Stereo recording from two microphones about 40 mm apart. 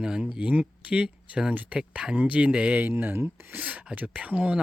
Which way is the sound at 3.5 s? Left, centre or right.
Right.